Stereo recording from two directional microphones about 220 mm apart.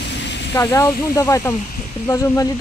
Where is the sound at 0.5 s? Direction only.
15° left (ahead or behind).